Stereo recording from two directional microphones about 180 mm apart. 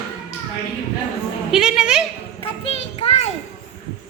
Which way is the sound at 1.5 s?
5° right (ahead or behind).